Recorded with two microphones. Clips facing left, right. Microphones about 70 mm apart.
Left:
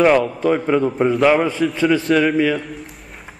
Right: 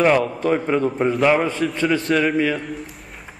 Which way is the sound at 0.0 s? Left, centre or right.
Centre.